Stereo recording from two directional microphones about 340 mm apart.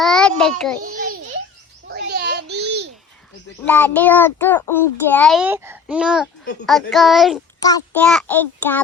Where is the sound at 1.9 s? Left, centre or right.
Right.